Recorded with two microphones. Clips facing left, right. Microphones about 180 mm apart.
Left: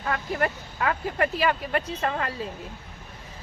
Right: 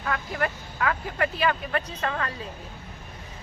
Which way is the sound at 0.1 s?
25° left (ahead or behind).